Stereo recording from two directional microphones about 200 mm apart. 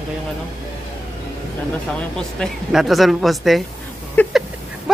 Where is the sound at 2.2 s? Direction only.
Centre (ahead or behind).